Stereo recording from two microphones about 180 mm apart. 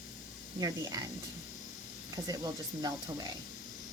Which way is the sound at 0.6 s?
20° right (ahead or behind).